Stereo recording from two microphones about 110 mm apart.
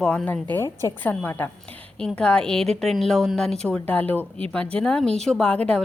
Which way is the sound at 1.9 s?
5° left (ahead or behind).